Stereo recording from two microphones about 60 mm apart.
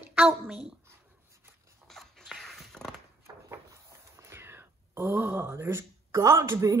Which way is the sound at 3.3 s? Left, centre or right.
Right.